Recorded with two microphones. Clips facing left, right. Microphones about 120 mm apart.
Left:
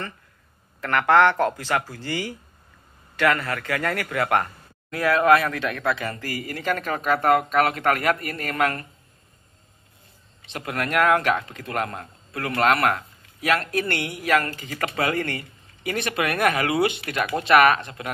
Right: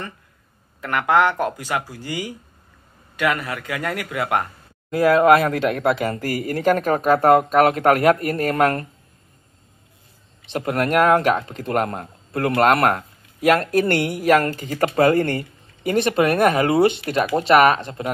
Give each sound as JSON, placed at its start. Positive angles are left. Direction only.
{"t": 0.7, "sound": "speech", "side_deg": -15}
{"t": 4.9, "sound": "speech", "side_deg": -35}
{"t": 10.4, "sound": "speech", "side_deg": -35}